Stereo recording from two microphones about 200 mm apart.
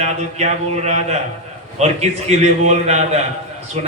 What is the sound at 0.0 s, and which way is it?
A man's voice, 35° right (ahead or behind).